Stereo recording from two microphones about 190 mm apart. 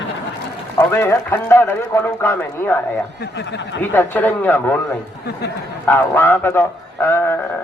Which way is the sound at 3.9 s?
10° left (ahead or behind).